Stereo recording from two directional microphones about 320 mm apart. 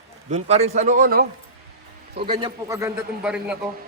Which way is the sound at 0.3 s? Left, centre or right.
Right.